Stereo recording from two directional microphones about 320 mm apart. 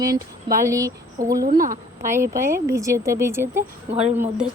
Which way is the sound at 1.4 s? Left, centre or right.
Right.